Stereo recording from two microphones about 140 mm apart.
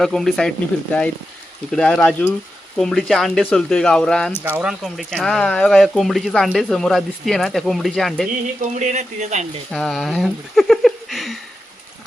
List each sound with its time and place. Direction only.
0.0 s speech: centre (ahead or behind)
1.7 s speech: 5° left (ahead or behind)
4.4 s speech: 10° right (ahead or behind)
8.6 s speech: 60° right (ahead or behind)
9.7 s speech: centre (ahead or behind)